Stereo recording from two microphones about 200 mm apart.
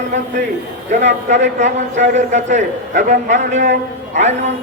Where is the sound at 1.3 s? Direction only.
40° right (ahead or behind).